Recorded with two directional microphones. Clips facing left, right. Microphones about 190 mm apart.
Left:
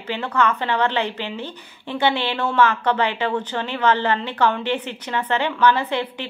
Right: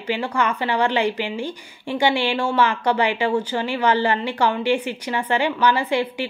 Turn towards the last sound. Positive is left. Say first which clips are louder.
# right 3 dB
turn(degrees=-10)  # may be behind; listen again after turning